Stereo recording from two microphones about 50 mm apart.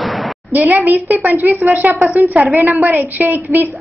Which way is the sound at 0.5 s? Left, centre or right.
Right.